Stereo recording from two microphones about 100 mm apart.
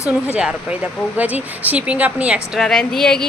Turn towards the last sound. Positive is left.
turn(degrees=5)  # may be behind; listen again after turning